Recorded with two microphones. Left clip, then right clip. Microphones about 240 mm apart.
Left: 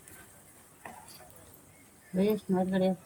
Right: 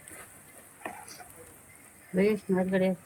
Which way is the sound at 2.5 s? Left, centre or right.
Centre.